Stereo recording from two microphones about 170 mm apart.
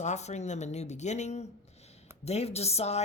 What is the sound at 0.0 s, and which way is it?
Speech, 40° left (ahead or behind).